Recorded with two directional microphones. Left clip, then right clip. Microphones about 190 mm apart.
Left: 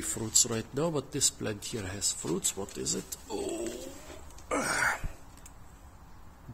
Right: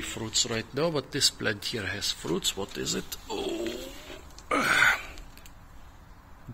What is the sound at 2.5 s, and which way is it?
Speech, centre (ahead or behind).